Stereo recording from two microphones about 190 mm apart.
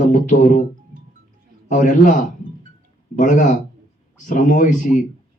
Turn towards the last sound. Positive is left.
turn(degrees=40)  # may be behind; listen again after turning